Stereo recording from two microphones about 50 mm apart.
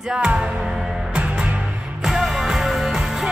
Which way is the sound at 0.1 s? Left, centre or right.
Centre.